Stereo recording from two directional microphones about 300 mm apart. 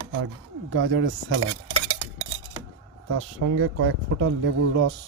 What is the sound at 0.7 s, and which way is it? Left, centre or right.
Speech, right.